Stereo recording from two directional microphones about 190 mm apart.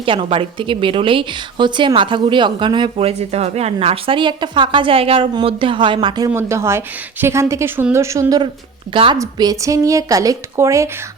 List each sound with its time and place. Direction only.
0.0 s a woman's voice: 30° right (ahead or behind)